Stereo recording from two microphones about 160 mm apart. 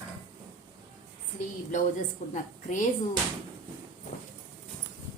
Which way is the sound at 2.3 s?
50° left (ahead or behind).